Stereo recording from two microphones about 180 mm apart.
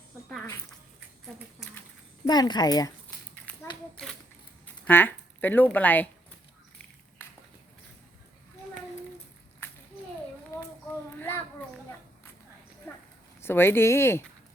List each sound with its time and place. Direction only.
2.2 s speech: 20° left (ahead or behind)
3.5 s a sound: 10° left (ahead or behind)
4.9 s speech: 10° left (ahead or behind)
9.6 s children playing: 15° left (ahead or behind)
10.5 s a sound: 15° left (ahead or behind)
13.4 s speech: 10° left (ahead or behind)